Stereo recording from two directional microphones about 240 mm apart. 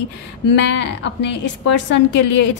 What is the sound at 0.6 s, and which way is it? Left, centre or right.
Speech, left.